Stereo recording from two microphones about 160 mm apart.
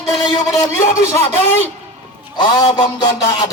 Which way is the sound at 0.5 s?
20° left (ahead or behind).